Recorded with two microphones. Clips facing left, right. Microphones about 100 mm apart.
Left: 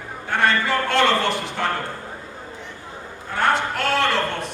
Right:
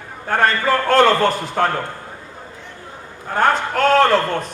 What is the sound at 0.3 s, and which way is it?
A man's voice, 45° right (ahead or behind).